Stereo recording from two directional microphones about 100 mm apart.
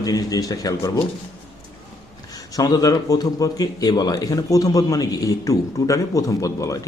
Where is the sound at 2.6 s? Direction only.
40° left (ahead or behind).